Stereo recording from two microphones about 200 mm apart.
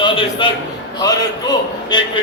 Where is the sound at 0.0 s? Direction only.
25° left (ahead or behind).